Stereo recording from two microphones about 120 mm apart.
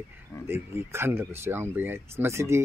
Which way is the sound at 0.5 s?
20° right (ahead or behind).